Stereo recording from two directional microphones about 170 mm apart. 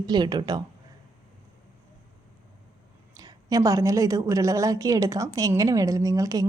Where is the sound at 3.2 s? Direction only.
20° right (ahead or behind).